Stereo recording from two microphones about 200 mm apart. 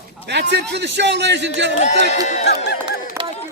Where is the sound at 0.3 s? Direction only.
60° right (ahead or behind).